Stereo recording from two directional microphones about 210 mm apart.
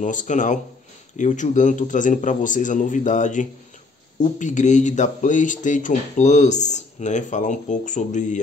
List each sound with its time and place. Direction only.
0.0 s speech: 35° left (ahead or behind)